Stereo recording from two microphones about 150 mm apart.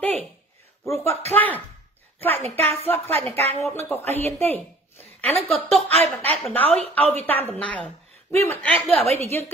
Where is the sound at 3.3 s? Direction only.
45° right (ahead or behind).